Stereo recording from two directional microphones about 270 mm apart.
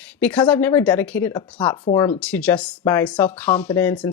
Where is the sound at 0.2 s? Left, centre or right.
Centre.